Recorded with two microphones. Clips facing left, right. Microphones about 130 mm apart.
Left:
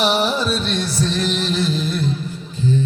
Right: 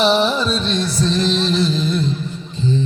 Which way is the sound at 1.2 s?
30° right (ahead or behind).